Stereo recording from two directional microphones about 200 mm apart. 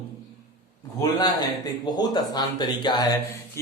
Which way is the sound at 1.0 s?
20° left (ahead or behind).